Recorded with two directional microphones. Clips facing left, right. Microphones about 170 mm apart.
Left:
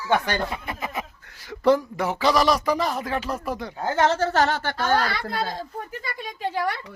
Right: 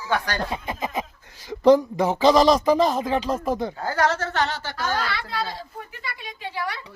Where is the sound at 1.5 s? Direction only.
20° right (ahead or behind).